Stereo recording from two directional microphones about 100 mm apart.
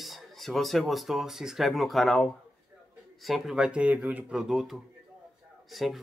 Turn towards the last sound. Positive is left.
turn(degrees=0)  # may be behind; listen again after turning